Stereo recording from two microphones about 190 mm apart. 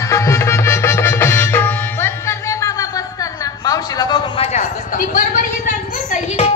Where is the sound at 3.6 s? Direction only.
20° left (ahead or behind).